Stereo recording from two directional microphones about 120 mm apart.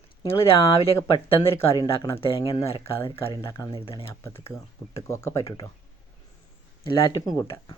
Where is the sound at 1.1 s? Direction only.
45° left (ahead or behind).